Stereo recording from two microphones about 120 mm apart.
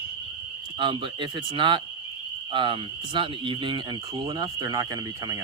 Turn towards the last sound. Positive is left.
turn(degrees=-30)  # may be behind; listen again after turning